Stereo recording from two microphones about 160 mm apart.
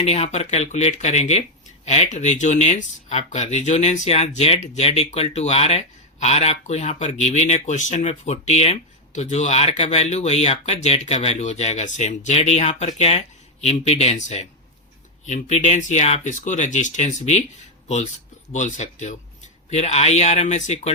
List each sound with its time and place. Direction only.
0.0 s speech: 40° left (ahead or behind)